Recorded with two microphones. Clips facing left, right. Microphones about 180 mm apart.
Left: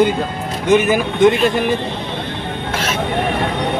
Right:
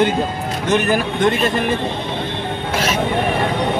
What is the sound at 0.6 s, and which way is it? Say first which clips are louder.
Speech: left 4 dB; 20° left (ahead or behind).